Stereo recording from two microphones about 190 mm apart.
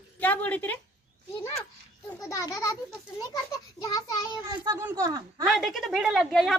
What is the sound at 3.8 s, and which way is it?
Child singing, 20° left (ahead or behind).